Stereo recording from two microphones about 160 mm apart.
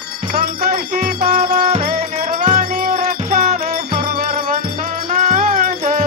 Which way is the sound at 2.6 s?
60° right (ahead or behind).